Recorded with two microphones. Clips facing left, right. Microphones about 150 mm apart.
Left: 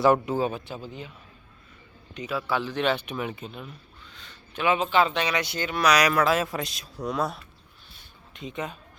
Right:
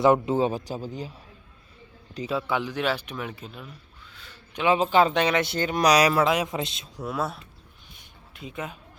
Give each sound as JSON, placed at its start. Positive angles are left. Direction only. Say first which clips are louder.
{"t": 0.0, "sound": "a man's voice", "louder": "right 1 dB", "side_deg": -25}
{"t": 0.7, "sound": "speech", "louder": "right 4 dB", "side_deg": -40}
{"t": 2.1, "sound": "a man's voice", "louder": "right 3 dB", "side_deg": -30}
{"t": 2.5, "sound": "speech", "louder": "left 3 dB", "side_deg": -15}
{"t": 4.1, "sound": "a sound", "louder": "right 1 dB", "side_deg": -5}
{"t": 4.5, "sound": "a man's voice", "louder": "right 2 dB", "side_deg": -25}
{"t": 4.8, "sound": "speech", "louder": "right 3 dB", "side_deg": -40}
{"t": 5.6, "sound": "speech", "louder": "right 2 dB", "side_deg": -35}
{"t": 6.3, "sound": "a man's voice", "louder": "even", "side_deg": -20}
{"t": 7.0, "sound": "speech", "louder": "left 1 dB", "side_deg": -5}